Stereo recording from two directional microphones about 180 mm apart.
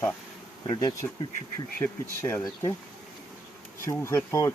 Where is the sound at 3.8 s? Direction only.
15° left (ahead or behind).